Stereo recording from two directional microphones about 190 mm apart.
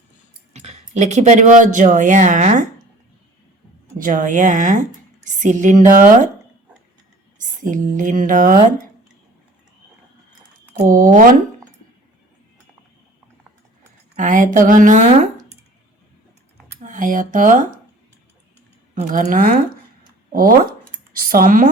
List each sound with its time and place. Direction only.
0.5 s speech: 35° right (ahead or behind)
3.9 s a woman's voice: 45° right (ahead or behind)
7.6 s speech: 40° right (ahead or behind)
10.8 s speech: 45° right (ahead or behind)
14.2 s speech: 40° right (ahead or behind)
16.8 s speech: 45° right (ahead or behind)
18.9 s speech: 40° right (ahead or behind)